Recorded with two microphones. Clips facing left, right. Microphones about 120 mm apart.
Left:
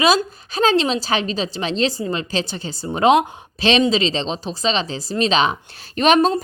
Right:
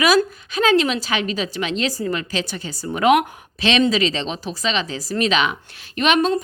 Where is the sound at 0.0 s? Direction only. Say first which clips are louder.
Even; 30° left (ahead or behind).